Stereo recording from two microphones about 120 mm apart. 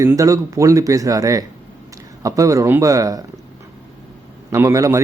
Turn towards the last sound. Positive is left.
turn(degrees=-25)  # may be behind; listen again after turning